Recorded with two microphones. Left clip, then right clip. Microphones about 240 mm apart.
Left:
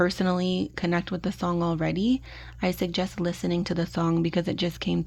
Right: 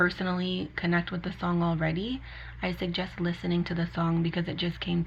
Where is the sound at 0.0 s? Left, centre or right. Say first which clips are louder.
Left 2 dB; left.